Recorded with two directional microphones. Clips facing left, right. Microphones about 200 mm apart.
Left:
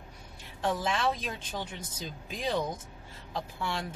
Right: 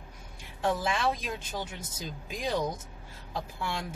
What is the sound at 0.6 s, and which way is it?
Speech, 10° right (ahead or behind).